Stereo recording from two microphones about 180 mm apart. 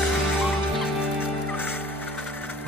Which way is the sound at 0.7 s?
10° left (ahead or behind).